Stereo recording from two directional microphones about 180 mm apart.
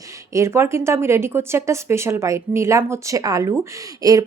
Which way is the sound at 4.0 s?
20° right (ahead or behind).